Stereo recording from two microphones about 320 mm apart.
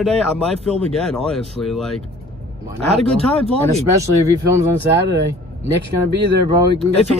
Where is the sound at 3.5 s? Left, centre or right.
Centre.